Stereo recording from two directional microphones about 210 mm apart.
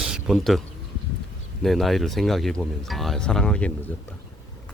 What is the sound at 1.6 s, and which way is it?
Speech, centre (ahead or behind).